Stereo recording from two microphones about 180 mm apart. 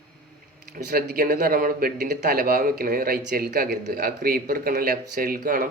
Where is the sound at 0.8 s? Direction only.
55° right (ahead or behind).